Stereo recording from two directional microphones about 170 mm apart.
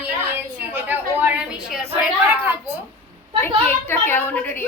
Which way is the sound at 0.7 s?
10° right (ahead or behind).